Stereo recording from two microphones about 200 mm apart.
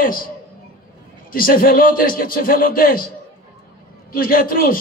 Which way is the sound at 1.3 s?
45° left (ahead or behind).